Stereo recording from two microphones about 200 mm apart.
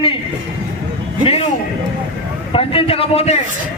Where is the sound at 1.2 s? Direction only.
30° left (ahead or behind).